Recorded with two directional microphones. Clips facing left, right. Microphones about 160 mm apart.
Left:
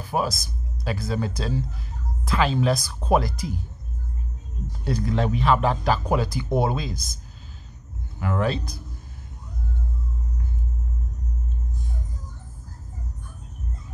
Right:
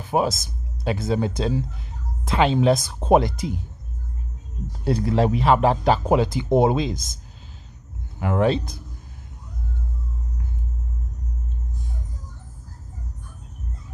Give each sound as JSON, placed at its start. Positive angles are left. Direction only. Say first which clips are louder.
{"t": 0.0, "sound": "speech", "louder": "right 4 dB", "side_deg": -20}
{"t": 4.8, "sound": "speech", "louder": "right 4 dB", "side_deg": -30}
{"t": 8.2, "sound": "speech", "louder": "right 5 dB", "side_deg": -25}